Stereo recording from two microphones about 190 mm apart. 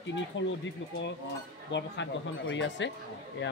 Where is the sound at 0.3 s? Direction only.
75° left (ahead or behind).